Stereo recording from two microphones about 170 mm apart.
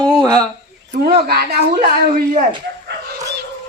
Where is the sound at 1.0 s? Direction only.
65° right (ahead or behind).